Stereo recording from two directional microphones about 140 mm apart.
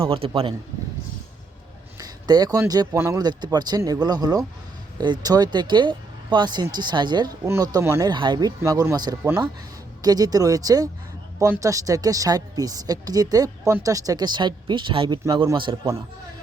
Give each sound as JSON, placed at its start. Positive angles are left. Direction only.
{"t": 0.0, "sound": "speech", "side_deg": -40}
{"t": 2.0, "sound": "a woman's voice", "side_deg": -25}
{"t": 8.1, "sound": "a woman's voice", "side_deg": -35}